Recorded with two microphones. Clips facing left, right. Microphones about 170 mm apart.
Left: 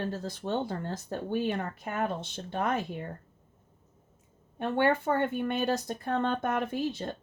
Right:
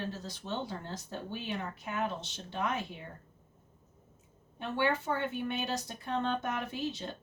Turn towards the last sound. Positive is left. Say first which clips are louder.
# left 5 dB
turn(degrees=55)  # may be behind; listen again after turning